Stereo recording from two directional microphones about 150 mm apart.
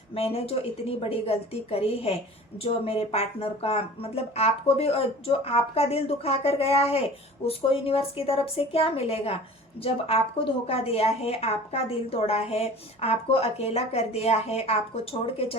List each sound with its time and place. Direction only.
0.1 s a woman's voice: 40° left (ahead or behind)